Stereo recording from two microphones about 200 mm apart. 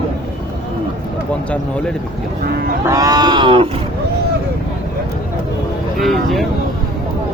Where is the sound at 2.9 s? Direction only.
20° right (ahead or behind).